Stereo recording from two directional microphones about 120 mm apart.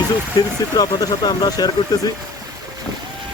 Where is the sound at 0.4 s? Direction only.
35° left (ahead or behind).